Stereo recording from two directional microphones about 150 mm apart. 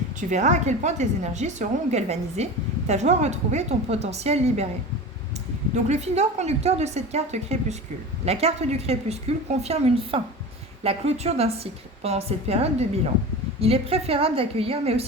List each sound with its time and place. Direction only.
0.2 s a woman's voice: 55° right (ahead or behind)
5.7 s a woman's voice: 50° right (ahead or behind)